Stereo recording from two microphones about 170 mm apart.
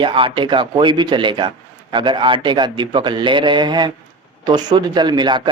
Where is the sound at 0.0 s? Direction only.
30° right (ahead or behind).